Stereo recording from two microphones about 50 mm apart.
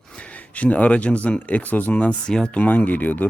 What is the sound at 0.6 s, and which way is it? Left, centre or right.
A man's voice, left.